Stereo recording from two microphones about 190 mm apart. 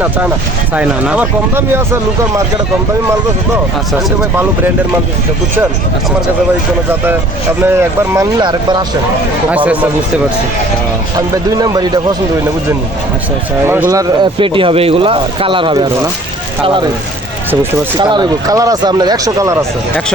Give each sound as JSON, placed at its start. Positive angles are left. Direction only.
{"t": 0.8, "sound": "speech", "side_deg": -5}
{"t": 4.2, "sound": "speech", "side_deg": -10}
{"t": 7.6, "sound": "speech", "side_deg": -10}
{"t": 11.6, "sound": "speech", "side_deg": -20}
{"t": 13.7, "sound": "speech", "side_deg": -15}
{"t": 17.9, "sound": "speech", "side_deg": -25}